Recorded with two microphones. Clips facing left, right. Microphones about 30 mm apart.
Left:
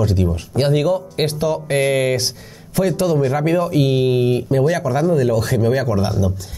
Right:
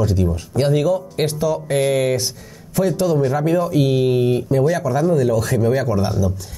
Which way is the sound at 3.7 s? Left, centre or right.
Left.